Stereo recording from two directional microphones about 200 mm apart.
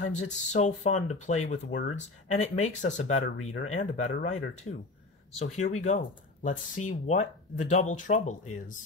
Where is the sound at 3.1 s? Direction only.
90° left.